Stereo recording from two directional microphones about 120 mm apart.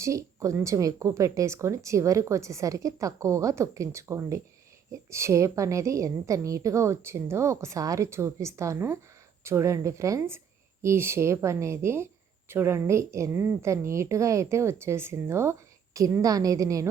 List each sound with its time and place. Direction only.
0.0 s speech: 25° right (ahead or behind)